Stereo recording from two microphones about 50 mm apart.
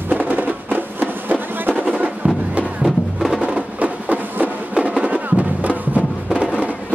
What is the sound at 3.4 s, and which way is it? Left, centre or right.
Music, right.